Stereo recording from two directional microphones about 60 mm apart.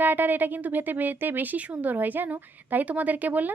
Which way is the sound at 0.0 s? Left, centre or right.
Right.